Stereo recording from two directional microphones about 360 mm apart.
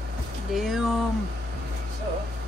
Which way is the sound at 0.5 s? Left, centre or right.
Centre.